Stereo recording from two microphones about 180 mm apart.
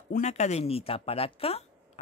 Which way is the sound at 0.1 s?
40° left (ahead or behind).